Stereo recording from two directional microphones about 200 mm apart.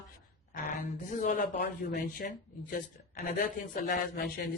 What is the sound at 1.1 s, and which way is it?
Speech, 45° left (ahead or behind).